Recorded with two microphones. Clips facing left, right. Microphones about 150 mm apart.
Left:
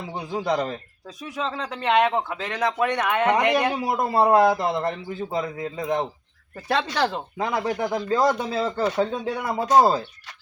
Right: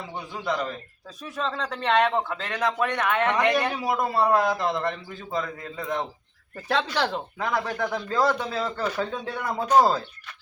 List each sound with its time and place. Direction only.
0.3 s a man's voice: 40° left (ahead or behind)
1.2 s a man's voice: 5° left (ahead or behind)
2.7 s a man's voice: 20° left (ahead or behind)
6.6 s speech: 10° left (ahead or behind)
7.3 s speech: 25° left (ahead or behind)